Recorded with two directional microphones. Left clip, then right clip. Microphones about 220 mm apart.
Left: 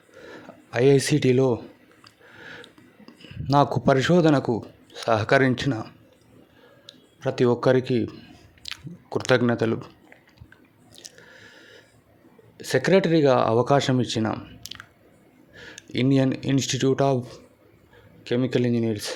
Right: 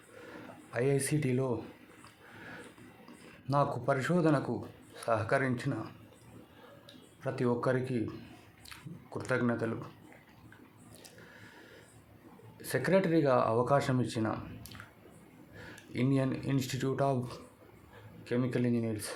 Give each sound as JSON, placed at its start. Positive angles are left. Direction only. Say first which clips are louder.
{"t": 0.7, "sound": "speech", "louder": "left 12 dB", "side_deg": 40}
{"t": 3.4, "sound": "speech", "louder": "left 10 dB", "side_deg": 35}
{"t": 6.8, "sound": "speech", "louder": "left 10 dB", "side_deg": 40}
{"t": 12.5, "sound": "speech", "louder": "left 9 dB", "side_deg": 35}
{"t": 18.2, "sound": "speech", "louder": "left 9 dB", "side_deg": 35}